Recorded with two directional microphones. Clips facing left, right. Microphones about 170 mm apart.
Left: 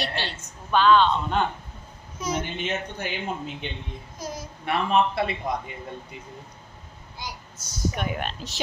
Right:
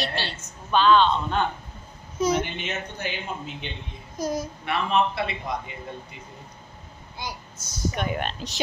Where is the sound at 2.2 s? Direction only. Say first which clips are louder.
Right 7 dB; 25° right (ahead or behind).